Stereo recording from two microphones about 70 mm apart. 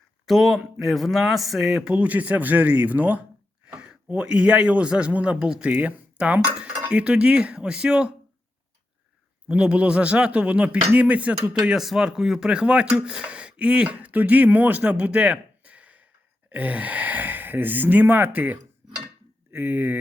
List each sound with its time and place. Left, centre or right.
0.3 s speech: centre
1.9 s speech: right
9.5 s speech: centre